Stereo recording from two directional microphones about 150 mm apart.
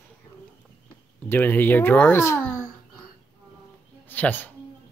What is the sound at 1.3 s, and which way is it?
A child's voice, 15° left (ahead or behind).